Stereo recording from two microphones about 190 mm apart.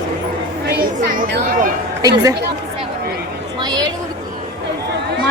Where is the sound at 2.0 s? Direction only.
20° right (ahead or behind).